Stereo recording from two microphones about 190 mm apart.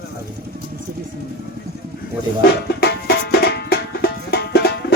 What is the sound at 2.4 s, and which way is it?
Music, 60° left (ahead or behind).